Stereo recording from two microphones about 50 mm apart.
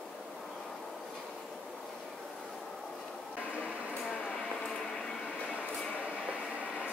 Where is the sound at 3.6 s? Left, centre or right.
Left.